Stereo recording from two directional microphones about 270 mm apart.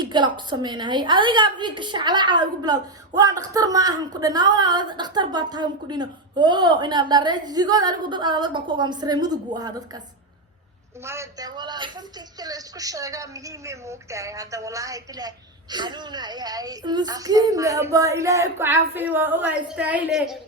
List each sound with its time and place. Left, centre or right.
0.0 s a woman's voice: centre
11.0 s a woman's voice: centre